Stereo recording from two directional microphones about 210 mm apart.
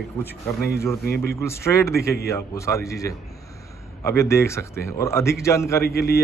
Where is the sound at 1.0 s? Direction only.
50° left (ahead or behind).